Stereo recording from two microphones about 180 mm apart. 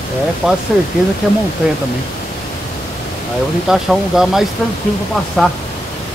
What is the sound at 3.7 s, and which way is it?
Speech, centre (ahead or behind).